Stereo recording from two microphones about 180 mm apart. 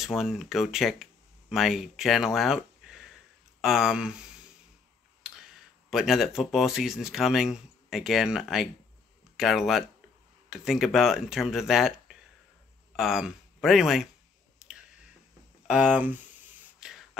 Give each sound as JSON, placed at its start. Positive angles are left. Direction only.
{"t": 0.0, "sound": "speech", "side_deg": 0}
{"t": 5.9, "sound": "speech", "side_deg": 0}
{"t": 12.9, "sound": "speech", "side_deg": 0}
{"t": 14.6, "sound": "clicking", "side_deg": -5}
{"t": 15.6, "sound": "speech", "side_deg": -5}
{"t": 16.8, "sound": "a sound", "side_deg": 0}